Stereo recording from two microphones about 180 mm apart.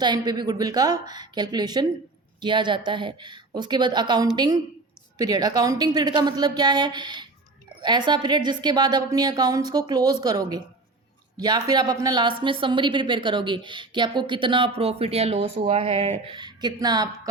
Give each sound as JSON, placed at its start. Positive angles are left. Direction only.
{"t": 0.0, "sound": "speech", "side_deg": -25}